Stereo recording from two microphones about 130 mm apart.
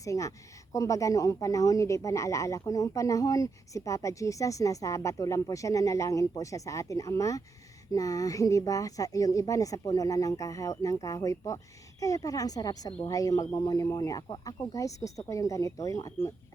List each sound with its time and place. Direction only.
0.0 s speech: 25° left (ahead or behind)